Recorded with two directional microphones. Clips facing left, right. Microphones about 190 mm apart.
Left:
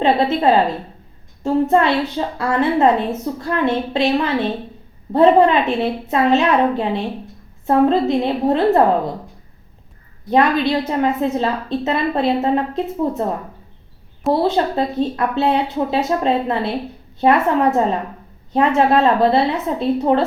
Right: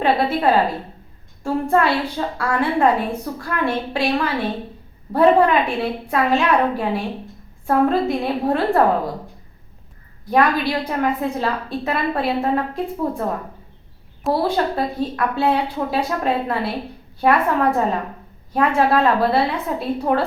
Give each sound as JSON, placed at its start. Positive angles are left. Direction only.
{"t": 0.0, "sound": "a sound", "side_deg": 25}
{"t": 1.5, "sound": "a woman's voice", "side_deg": 20}
{"t": 10.2, "sound": "a woman's voice", "side_deg": 25}
{"t": 14.4, "sound": "a woman's voice", "side_deg": 25}